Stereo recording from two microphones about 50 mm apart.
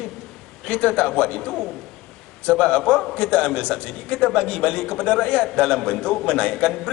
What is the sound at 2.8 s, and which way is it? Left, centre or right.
Speech, centre.